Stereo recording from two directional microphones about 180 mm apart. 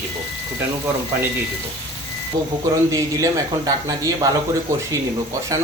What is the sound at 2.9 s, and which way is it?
Speech, 20° right (ahead or behind).